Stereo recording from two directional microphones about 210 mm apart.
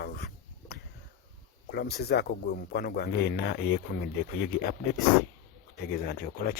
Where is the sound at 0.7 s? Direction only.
50° left (ahead or behind).